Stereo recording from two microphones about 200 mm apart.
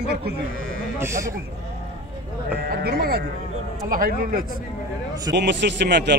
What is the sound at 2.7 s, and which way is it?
A man's voice, 50° right (ahead or behind).